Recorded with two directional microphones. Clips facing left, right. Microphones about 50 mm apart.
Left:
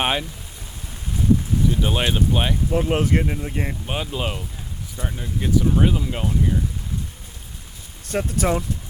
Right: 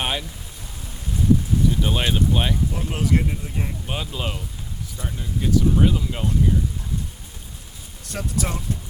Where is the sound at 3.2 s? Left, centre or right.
Left.